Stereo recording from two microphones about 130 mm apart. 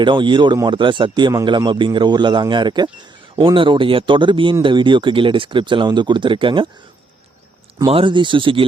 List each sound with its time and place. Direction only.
0.0 s speech: 35° right (ahead or behind)
7.9 s speech: 45° right (ahead or behind)